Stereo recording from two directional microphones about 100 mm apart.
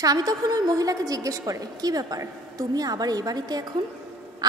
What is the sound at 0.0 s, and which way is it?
A woman's voice, 40° right (ahead or behind).